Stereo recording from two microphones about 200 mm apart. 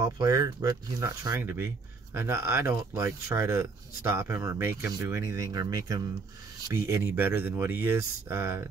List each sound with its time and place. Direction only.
0.0 s speech: 15° right (ahead or behind)